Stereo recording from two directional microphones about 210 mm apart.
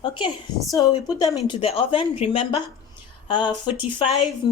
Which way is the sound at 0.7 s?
15° left (ahead or behind).